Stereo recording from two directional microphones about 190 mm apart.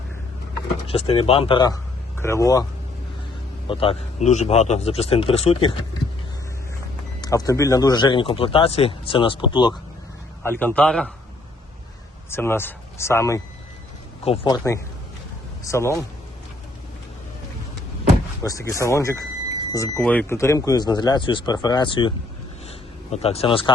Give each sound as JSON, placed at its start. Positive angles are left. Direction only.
{"t": 0.9, "sound": "speech", "side_deg": 30}
{"t": 3.7, "sound": "speech", "side_deg": 30}
{"t": 7.2, "sound": "speech", "side_deg": 20}
{"t": 10.4, "sound": "speech", "side_deg": 10}
{"t": 12.3, "sound": "speech", "side_deg": 10}
{"t": 18.4, "sound": "speech", "side_deg": 15}
{"t": 23.1, "sound": "speech", "side_deg": 30}